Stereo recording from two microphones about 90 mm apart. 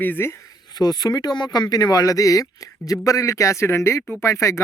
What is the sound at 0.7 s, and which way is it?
Speech, 50° left (ahead or behind).